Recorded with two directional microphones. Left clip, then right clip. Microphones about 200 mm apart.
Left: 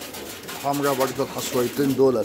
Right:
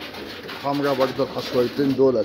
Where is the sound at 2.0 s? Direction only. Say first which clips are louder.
Right 1 dB; 15° left (ahead or behind).